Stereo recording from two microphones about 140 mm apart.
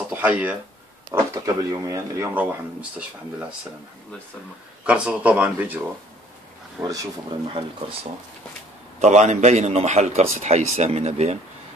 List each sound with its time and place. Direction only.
0.1 s speech: 10° right (ahead or behind)
1.3 s speech: 25° right (ahead or behind)
2.3 s speech: 10° right (ahead or behind)
4.8 s speech: 10° right (ahead or behind)
6.8 s speech: 25° right (ahead or behind)
9.0 s a man's voice: 55° right (ahead or behind)